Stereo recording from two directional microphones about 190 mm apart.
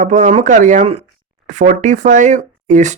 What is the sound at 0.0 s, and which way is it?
Speech, 40° right (ahead or behind).